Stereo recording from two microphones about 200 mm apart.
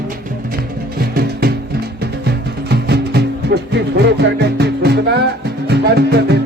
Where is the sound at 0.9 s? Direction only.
50° right (ahead or behind).